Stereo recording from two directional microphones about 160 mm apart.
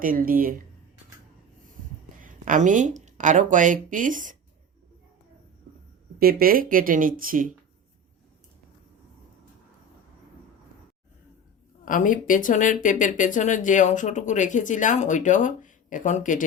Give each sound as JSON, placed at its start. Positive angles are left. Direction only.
{"t": 0.0, "sound": "speech", "side_deg": -60}
{"t": 2.2, "sound": "speech", "side_deg": -55}
{"t": 6.1, "sound": "speech", "side_deg": -70}
{"t": 11.9, "sound": "speech", "side_deg": 55}